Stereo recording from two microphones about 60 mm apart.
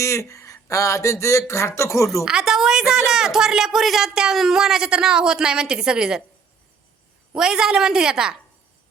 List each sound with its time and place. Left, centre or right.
0.0 s speech: left
2.2 s a woman's voice: centre
7.3 s speech: centre